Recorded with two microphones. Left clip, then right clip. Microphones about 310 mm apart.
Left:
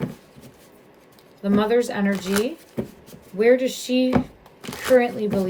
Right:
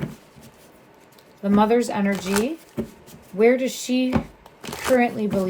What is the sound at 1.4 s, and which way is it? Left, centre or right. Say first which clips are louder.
Speech: right 1 dB; centre.